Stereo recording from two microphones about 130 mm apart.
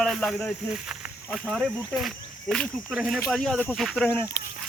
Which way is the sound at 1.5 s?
5° left (ahead or behind).